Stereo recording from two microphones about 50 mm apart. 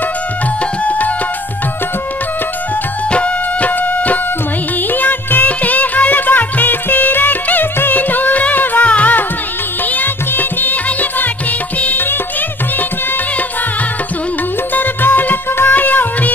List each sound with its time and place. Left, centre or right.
0.8 s music: left
3.1 s music: left
14.7 s music: left